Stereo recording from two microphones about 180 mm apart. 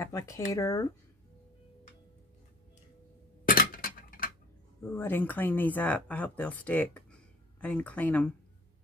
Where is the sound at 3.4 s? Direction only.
55° left (ahead or behind).